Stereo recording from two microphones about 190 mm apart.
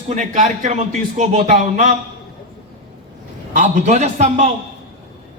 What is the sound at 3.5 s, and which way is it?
Speech, 40° right (ahead or behind).